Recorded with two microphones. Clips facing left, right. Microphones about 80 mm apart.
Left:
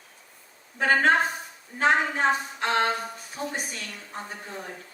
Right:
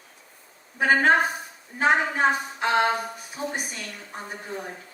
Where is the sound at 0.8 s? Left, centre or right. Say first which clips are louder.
Right 2 dB; centre.